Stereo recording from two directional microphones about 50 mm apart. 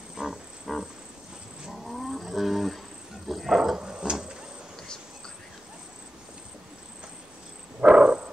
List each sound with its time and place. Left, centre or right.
0.1 s insect: centre
1.7 s cat: centre
3.3 s dog: centre
7.8 s a sound: centre